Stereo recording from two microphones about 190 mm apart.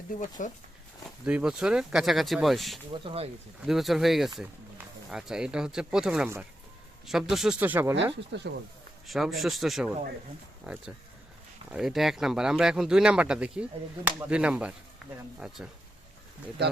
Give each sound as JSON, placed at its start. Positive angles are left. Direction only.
{"t": 0.2, "sound": "speech", "side_deg": 45}
{"t": 1.2, "sound": "speech", "side_deg": -5}
{"t": 2.9, "sound": "speech", "side_deg": -25}
{"t": 3.7, "sound": "speech", "side_deg": 0}
{"t": 8.1, "sound": "speech", "side_deg": -65}
{"t": 9.0, "sound": "speech", "side_deg": 0}
{"t": 16.6, "sound": "speech", "side_deg": -60}